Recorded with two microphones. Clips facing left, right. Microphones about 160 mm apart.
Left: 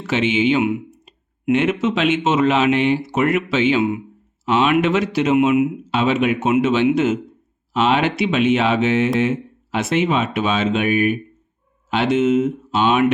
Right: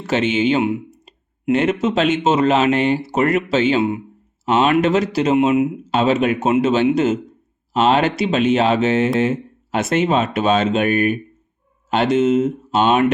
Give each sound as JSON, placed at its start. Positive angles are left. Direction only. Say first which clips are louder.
{"t": 0.1, "sound": "speech", "louder": "even", "side_deg": -40}